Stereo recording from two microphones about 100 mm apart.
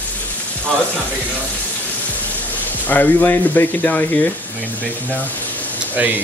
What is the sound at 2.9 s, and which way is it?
Speech, 15° left (ahead or behind).